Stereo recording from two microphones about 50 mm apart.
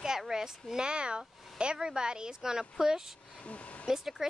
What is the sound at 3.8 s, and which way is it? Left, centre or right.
Speech, centre.